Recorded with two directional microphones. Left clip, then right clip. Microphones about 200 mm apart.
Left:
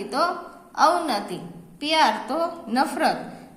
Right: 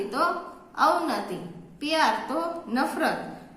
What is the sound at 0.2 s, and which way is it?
A woman's voice, 40° left (ahead or behind).